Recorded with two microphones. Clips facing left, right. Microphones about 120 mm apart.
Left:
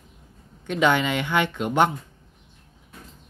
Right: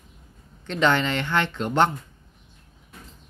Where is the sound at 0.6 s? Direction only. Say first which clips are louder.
Left 1 dB; 10° left (ahead or behind).